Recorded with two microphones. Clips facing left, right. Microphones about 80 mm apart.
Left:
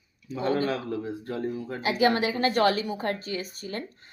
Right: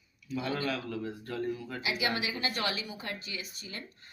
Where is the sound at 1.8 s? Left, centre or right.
Left.